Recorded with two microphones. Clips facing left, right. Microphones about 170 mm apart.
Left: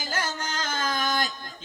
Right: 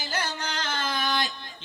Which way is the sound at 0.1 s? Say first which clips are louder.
Left 1 dB; 45° left (ahead or behind).